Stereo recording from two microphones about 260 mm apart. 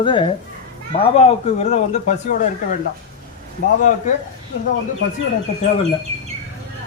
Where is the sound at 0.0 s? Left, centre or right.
Centre.